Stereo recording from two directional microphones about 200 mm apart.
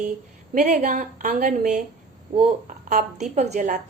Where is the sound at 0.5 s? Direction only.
40° right (ahead or behind).